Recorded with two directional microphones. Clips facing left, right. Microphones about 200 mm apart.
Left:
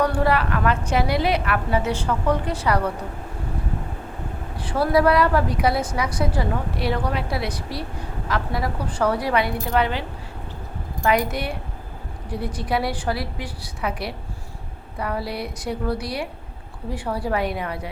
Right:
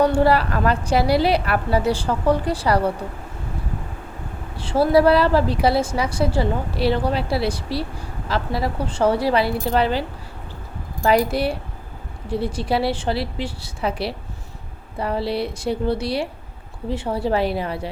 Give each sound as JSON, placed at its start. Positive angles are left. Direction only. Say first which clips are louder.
{"t": 0.0, "sound": "a woman's voice", "louder": "right 4 dB", "side_deg": -30}
{"t": 4.6, "sound": "a woman's voice", "louder": "right 3 dB", "side_deg": -25}